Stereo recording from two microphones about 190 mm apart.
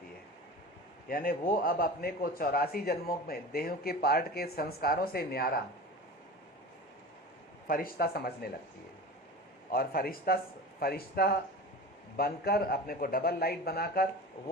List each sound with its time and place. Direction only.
1.0 s a man's voice: 50° left (ahead or behind)
7.7 s a man's voice: 50° left (ahead or behind)
9.7 s a man's voice: 50° left (ahead or behind)